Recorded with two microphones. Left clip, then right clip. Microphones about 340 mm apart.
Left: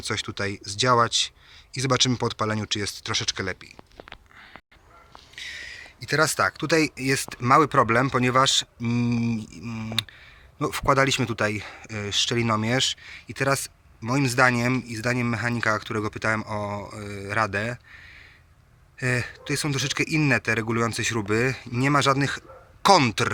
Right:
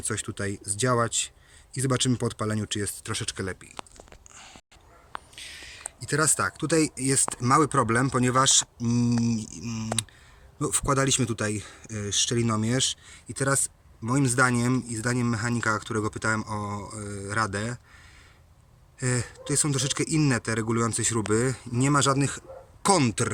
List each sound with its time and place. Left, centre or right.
0.0 s speech: centre
5.3 s speech: centre